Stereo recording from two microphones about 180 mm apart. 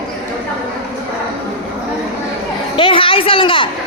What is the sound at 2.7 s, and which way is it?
Speech, 30° left (ahead or behind).